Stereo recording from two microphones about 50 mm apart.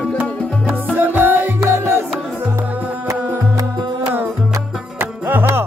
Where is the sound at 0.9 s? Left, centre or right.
Right.